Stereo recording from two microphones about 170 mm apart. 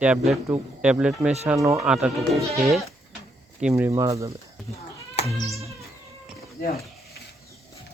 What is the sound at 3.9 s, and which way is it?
Speech, 20° right (ahead or behind).